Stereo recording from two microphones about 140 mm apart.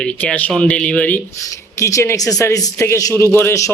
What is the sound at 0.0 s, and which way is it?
A man's voice, 10° left (ahead or behind).